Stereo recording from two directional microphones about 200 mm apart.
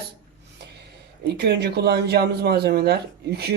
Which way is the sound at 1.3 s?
55° right (ahead or behind).